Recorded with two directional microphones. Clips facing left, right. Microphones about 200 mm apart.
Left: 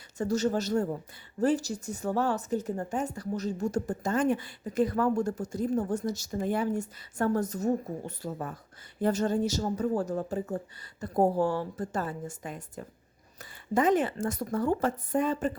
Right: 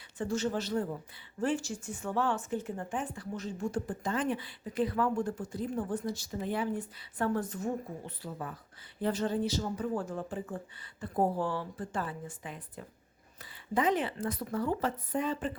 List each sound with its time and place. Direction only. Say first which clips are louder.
0.2 s speech: left 5 dB; 40° left (ahead or behind)